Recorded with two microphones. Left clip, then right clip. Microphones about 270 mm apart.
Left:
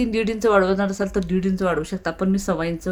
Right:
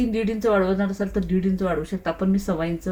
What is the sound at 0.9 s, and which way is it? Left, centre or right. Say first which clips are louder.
Speech: left 3 dB; left.